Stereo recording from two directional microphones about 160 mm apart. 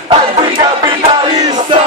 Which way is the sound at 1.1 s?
25° right (ahead or behind).